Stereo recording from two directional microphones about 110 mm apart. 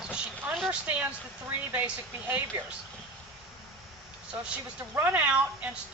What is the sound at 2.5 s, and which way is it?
Speech, 25° right (ahead or behind).